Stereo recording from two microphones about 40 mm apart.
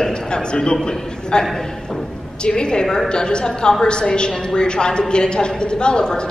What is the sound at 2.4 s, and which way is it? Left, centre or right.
A woman's voice, left.